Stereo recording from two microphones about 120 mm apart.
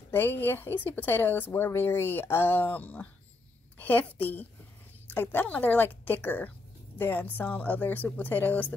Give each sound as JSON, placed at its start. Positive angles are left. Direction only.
{"t": 0.1, "sound": "a woman's voice", "side_deg": 15}